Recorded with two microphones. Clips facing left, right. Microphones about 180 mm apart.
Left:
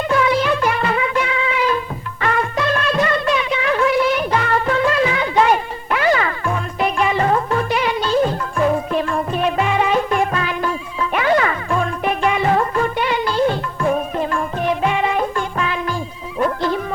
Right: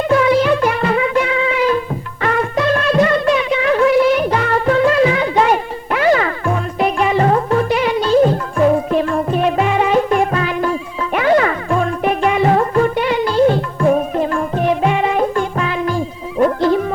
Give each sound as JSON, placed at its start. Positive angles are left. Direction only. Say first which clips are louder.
{"t": 0.1, "sound": "music", "louder": "right 5 dB", "side_deg": -45}